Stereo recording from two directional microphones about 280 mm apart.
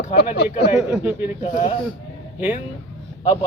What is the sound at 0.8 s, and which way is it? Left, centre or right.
Speech, centre.